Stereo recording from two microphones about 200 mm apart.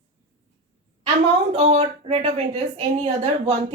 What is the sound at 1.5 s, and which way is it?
A woman's voice, 30° right (ahead or behind).